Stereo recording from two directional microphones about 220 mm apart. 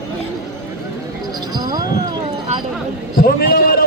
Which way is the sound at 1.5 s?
20° right (ahead or behind).